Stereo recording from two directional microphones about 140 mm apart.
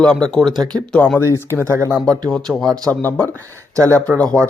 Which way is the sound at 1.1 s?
20° left (ahead or behind).